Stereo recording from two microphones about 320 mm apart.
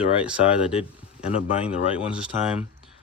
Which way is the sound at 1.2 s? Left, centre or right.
Centre.